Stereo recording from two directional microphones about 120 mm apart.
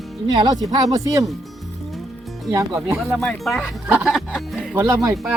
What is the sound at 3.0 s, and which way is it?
Speech, 5° left (ahead or behind).